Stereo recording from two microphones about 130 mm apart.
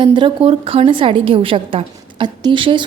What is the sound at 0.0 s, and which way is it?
A woman's voice, 40° right (ahead or behind).